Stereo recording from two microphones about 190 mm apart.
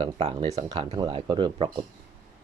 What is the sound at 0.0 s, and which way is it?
Speech, 25° right (ahead or behind).